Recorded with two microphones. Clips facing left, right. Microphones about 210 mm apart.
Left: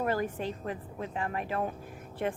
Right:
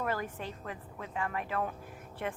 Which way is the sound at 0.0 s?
35° left (ahead or behind).